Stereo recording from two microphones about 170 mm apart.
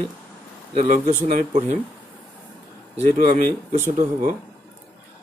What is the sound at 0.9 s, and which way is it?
Speech, 45° right (ahead or behind).